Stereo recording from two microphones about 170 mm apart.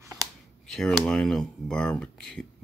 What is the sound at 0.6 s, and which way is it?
Speech, centre (ahead or behind).